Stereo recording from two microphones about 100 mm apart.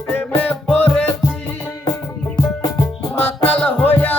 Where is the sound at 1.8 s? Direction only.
45° left (ahead or behind).